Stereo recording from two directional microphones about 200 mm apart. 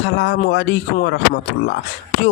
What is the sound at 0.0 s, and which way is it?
A man's voice, 60° left (ahead or behind).